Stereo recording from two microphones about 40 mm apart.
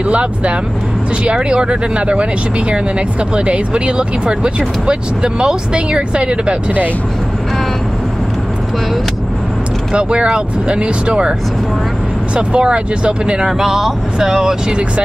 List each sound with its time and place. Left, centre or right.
0.0 s speech: right
3.3 s speech: right
9.9 s speech: right
12.4 s speech: right
13.5 s speech: centre